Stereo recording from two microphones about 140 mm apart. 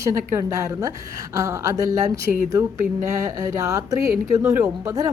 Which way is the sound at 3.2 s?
20° right (ahead or behind).